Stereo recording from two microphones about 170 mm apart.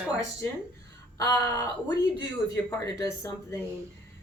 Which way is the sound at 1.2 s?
20° left (ahead or behind).